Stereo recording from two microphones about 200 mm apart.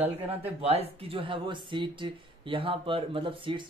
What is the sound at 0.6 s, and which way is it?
Speech, 30° right (ahead or behind).